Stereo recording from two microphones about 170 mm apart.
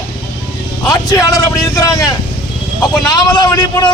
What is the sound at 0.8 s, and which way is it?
Speech, 20° left (ahead or behind).